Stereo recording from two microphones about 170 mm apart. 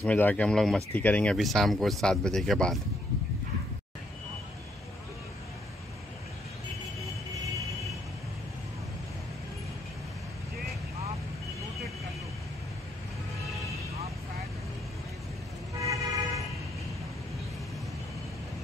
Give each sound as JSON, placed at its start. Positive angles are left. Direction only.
{"t": 0.0, "sound": "speech", "side_deg": 10}
{"t": 15.8, "sound": "vehicle", "side_deg": -20}